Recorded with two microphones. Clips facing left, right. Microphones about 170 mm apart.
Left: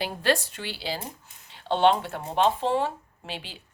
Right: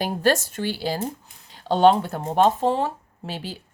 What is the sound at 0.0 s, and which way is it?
Speech, 45° right (ahead or behind).